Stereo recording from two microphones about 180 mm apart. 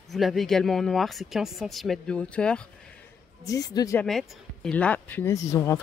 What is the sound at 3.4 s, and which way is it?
Speech, 20° left (ahead or behind).